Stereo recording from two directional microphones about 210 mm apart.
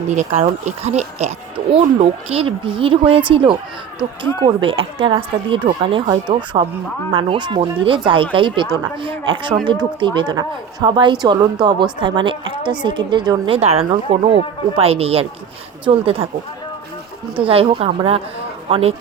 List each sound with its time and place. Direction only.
0.1 s speech: 35° right (ahead or behind)
17.3 s speech: 25° right (ahead or behind)